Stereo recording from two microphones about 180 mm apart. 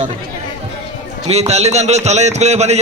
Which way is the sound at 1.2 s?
35° right (ahead or behind).